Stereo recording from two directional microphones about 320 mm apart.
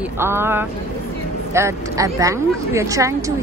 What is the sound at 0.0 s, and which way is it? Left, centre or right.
A woman's voice, centre.